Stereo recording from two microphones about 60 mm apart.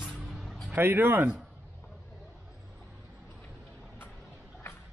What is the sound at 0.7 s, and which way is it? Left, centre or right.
Speech, right.